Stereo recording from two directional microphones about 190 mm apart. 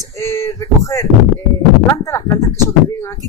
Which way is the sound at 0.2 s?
15° left (ahead or behind).